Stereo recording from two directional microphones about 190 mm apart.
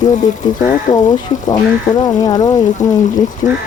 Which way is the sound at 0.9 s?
20° left (ahead or behind).